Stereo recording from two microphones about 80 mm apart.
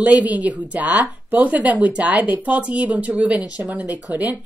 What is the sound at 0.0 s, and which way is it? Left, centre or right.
Speech, centre.